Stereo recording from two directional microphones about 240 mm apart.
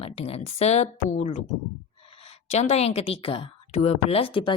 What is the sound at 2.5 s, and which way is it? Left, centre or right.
A woman's voice, left.